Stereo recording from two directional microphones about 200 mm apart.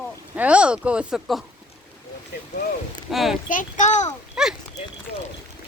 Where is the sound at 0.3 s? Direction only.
5° right (ahead or behind).